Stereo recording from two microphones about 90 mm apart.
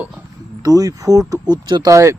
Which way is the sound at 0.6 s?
45° right (ahead or behind).